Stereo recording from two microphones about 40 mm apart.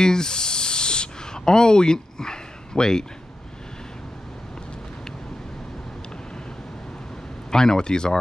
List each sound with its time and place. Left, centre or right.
0.0 s snake: centre
7.5 s speech: centre